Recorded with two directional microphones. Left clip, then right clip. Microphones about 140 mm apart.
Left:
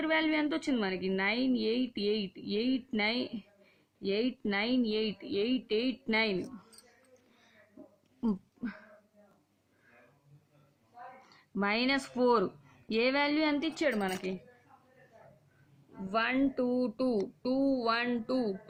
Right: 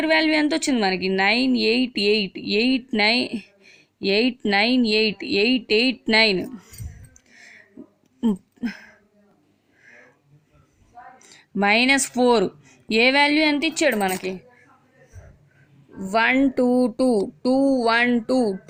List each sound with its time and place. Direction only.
0.0 s a woman's voice: 40° right (ahead or behind)
11.6 s a woman's voice: 35° right (ahead or behind)
13.8 s a woman's voice: 45° right (ahead or behind)
16.0 s speech: 65° right (ahead or behind); by 17.2 s 90° right
17.7 s speech: 65° right (ahead or behind)